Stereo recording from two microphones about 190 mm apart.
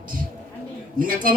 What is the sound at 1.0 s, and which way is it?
Speech, 50° right (ahead or behind).